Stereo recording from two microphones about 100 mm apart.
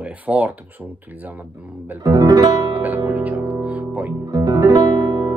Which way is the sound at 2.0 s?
35° right (ahead or behind).